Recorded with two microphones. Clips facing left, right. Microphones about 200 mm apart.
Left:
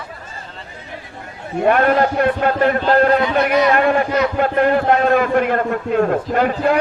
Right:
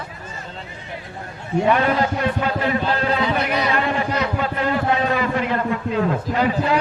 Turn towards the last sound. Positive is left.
turn(degrees=55)  # may be behind; listen again after turning